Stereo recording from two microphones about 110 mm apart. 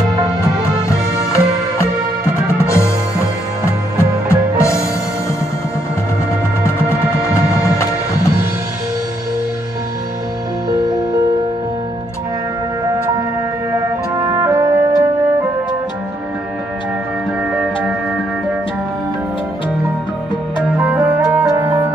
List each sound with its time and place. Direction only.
0.8 s music: 25° left (ahead or behind)
14.1 s music: 25° right (ahead or behind)
20.8 s music: 15° right (ahead or behind)